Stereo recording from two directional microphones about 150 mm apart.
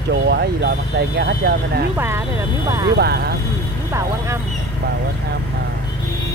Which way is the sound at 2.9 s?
90° right.